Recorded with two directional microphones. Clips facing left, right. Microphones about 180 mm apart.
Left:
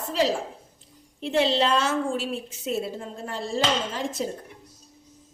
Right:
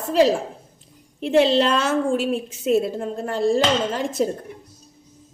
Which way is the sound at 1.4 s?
55° right (ahead or behind).